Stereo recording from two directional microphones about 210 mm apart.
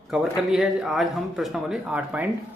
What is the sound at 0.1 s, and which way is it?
Speech, centre (ahead or behind).